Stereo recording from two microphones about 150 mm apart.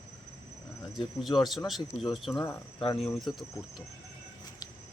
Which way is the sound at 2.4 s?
15° left (ahead or behind).